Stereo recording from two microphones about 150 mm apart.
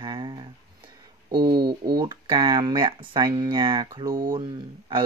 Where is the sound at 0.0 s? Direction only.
30° right (ahead or behind).